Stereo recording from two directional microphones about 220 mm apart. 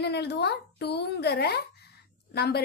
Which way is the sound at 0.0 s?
50° left (ahead or behind).